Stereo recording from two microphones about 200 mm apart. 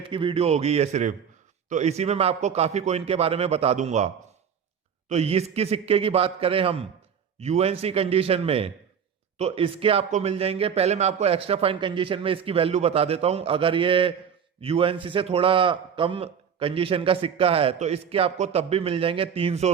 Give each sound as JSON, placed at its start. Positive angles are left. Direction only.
{"t": 0.1, "sound": "a man's voice", "side_deg": -25}